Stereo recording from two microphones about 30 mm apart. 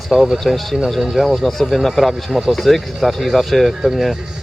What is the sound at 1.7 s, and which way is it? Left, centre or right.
Speech, centre.